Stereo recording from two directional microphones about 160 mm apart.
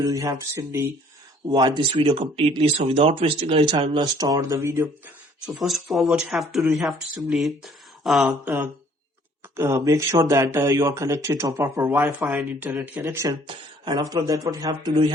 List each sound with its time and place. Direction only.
0.0 s speech: 20° right (ahead or behind)
1.5 s speech: 25° right (ahead or behind)
5.5 s speech: centre (ahead or behind)
12.0 s speech: centre (ahead or behind)
13.5 s speech: 25° right (ahead or behind)